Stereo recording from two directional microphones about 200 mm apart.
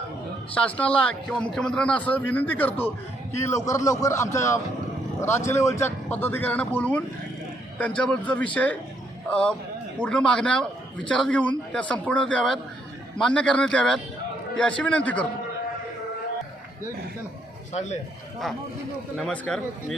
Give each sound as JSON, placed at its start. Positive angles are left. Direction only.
{"t": 0.5, "sound": "a man's voice", "side_deg": 5}
{"t": 19.1, "sound": "speech", "side_deg": 5}